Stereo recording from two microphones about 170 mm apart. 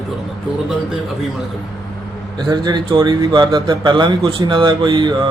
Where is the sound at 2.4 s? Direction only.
25° right (ahead or behind).